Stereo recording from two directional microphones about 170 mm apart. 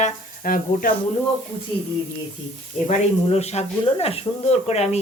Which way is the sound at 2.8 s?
40° left (ahead or behind).